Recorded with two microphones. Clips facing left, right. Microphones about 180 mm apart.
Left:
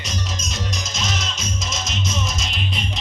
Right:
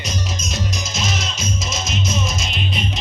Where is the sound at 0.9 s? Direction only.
5° right (ahead or behind).